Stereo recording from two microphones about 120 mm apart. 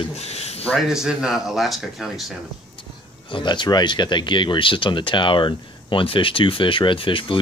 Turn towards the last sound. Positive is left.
turn(degrees=45)  # may be behind; listen again after turning